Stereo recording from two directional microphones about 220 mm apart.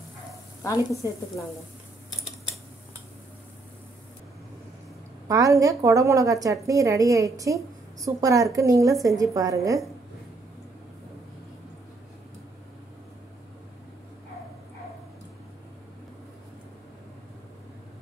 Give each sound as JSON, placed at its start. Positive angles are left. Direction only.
{"t": 0.7, "sound": "speech", "side_deg": 15}
{"t": 5.3, "sound": "a woman's voice", "side_deg": -15}